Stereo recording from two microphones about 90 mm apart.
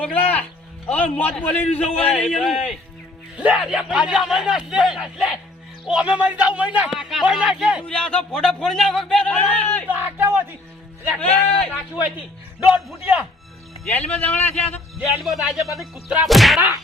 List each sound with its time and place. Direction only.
0.0 s speech: 20° left (ahead or behind)
2.4 s whack: centre (ahead or behind)
3.3 s speech: 15° right (ahead or behind)
6.9 s whack: 5° right (ahead or behind)
7.3 s speech: 10° right (ahead or behind)
7.9 s speech: 10° left (ahead or behind)
9.9 s speech: 20° right (ahead or behind)
11.2 s speech: 15° left (ahead or behind)
12.5 s a man's voice: 15° right (ahead or behind)
13.9 s a man's voice: 20° left (ahead or behind)
15.2 s whack: centre (ahead or behind)